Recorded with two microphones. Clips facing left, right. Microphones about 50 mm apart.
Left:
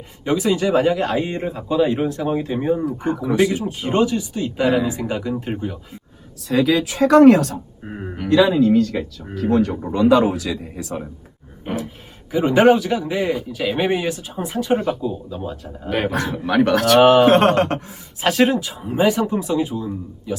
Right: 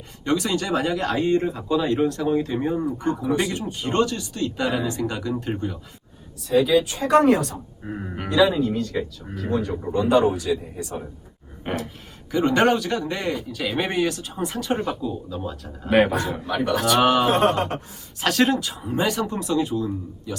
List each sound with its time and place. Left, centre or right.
0.3 s speech: centre
6.5 s speech: left
7.9 s speech: centre
8.4 s speech: left
11.7 s speech: centre
12.3 s speech: centre
15.9 s speech: centre
16.5 s speech: left
17.0 s speech: centre
17.2 s speech: left
18.2 s speech: centre